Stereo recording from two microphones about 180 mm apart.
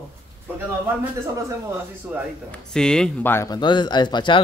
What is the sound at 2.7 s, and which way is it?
Speech, 5° left (ahead or behind).